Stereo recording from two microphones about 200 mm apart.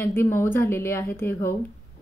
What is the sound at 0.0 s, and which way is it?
A woman's voice, 10° left (ahead or behind).